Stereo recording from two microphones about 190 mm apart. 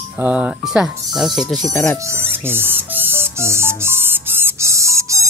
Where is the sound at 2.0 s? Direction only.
15° right (ahead or behind).